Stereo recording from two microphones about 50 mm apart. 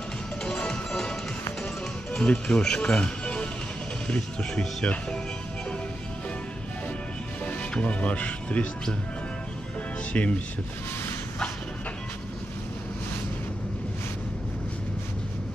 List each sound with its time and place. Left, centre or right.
0.5 s music: centre
2.1 s speech: left
7.8 s speech: left
10.1 s speech: left